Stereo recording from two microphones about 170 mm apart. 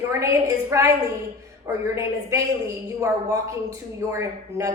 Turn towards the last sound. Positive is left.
turn(degrees=-20)  # may be behind; listen again after turning